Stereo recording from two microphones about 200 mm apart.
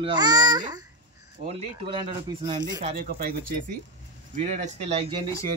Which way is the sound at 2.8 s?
45° right (ahead or behind).